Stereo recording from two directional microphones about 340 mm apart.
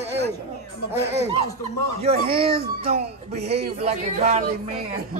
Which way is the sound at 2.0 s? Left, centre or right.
Centre.